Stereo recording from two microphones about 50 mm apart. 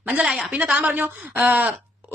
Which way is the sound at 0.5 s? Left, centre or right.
Right.